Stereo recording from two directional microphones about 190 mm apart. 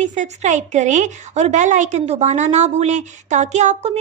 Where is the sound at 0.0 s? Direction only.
40° right (ahead or behind).